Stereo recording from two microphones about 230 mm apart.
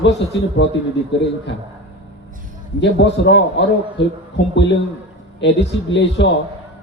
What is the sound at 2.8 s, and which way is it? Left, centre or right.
A man's voice, left.